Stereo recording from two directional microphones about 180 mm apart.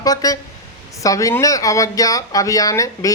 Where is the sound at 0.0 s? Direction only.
20° left (ahead or behind).